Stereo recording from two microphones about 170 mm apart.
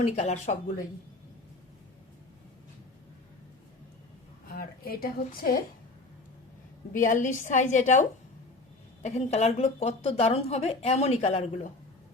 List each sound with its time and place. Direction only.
0.0 s speech: 40° left (ahead or behind)
4.4 s a woman's voice: 60° left (ahead or behind)
6.9 s a woman's voice: 50° left (ahead or behind)
9.0 s speech: 40° left (ahead or behind)